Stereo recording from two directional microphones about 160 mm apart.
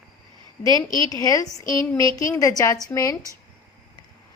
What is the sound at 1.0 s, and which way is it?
A woman's voice, 20° left (ahead or behind).